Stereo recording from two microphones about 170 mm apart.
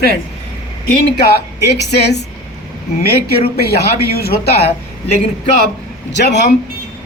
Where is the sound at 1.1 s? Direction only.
75° left (ahead or behind).